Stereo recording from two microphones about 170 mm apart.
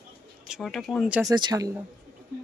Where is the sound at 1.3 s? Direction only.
25° right (ahead or behind).